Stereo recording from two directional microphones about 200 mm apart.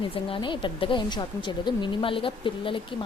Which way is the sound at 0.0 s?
25° left (ahead or behind).